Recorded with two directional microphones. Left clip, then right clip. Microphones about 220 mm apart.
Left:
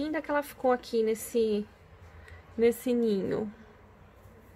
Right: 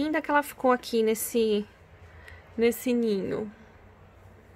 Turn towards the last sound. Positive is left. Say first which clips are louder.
# right 1 dB
turn(degrees=0)  # may be behind; listen again after turning